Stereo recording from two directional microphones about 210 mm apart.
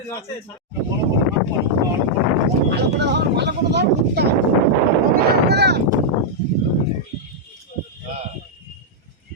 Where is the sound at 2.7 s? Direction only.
55° right (ahead or behind).